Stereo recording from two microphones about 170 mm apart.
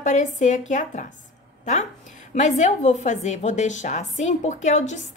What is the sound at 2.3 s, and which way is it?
Speech, 45° left (ahead or behind).